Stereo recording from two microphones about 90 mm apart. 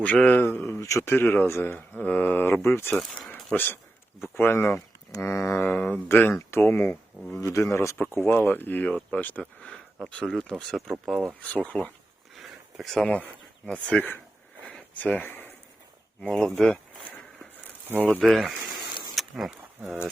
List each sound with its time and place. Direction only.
0.0 s speech: 15° left (ahead or behind)
0.7 s speech: 35° left (ahead or behind)
1.1 s speech: 25° left (ahead or behind)
2.9 s speech: 5° left (ahead or behind)
4.4 s speech: 25° left (ahead or behind); by 11.3 s 5° right (ahead or behind)
11.4 s speech: 15° left (ahead or behind)
12.4 s a sound: centre (ahead or behind)
13.9 s speech: 20° left (ahead or behind)
14.6 s a sound: 15° left (ahead or behind)
16.2 s speech: 5° left (ahead or behind)
18.2 s speech: centre (ahead or behind)
19.1 s a sound: centre (ahead or behind)